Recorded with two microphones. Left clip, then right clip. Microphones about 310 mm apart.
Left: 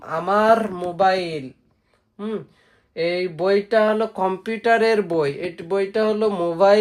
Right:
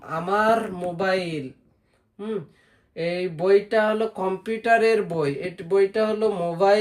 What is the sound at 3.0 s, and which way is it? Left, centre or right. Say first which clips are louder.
Speech: left 4 dB; left.